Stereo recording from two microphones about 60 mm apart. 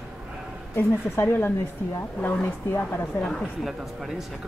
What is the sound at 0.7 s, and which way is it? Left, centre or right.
Speech, left.